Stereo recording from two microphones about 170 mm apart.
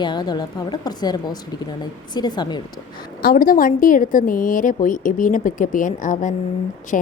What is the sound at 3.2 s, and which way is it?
A woman's voice, 60° left (ahead or behind).